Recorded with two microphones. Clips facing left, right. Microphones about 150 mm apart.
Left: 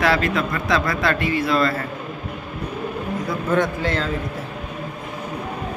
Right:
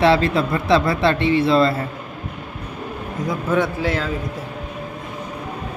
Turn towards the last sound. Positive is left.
turn(degrees=-5)  # may be behind; listen again after turning